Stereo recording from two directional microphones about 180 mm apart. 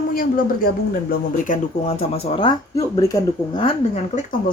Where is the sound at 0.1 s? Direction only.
55° left (ahead or behind).